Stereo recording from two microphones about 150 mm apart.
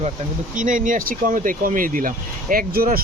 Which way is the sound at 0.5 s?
60° right (ahead or behind).